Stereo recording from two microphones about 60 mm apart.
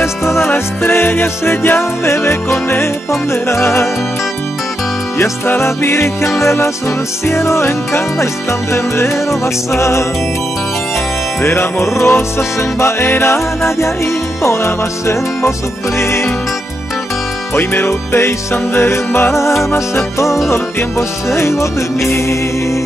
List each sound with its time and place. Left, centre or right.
0.0 s music: left
5.6 s music: left
11.4 s music: left
17.6 s music: left